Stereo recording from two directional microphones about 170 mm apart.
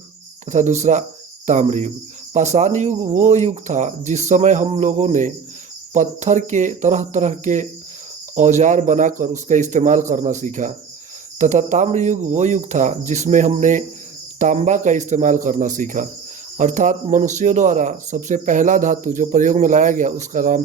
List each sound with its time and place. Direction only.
0.4 s speech: 45° right (ahead or behind)